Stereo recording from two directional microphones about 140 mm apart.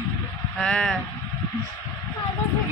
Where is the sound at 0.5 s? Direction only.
5° left (ahead or behind).